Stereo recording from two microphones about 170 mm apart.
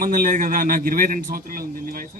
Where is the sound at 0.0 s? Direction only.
55° right (ahead or behind).